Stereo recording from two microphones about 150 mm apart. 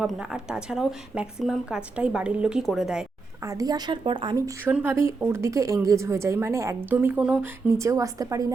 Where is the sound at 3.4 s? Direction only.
25° right (ahead or behind).